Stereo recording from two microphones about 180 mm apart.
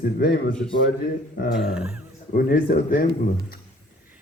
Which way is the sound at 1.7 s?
5° right (ahead or behind).